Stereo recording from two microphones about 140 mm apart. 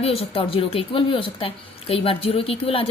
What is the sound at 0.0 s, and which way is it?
A woman's voice, 45° left (ahead or behind).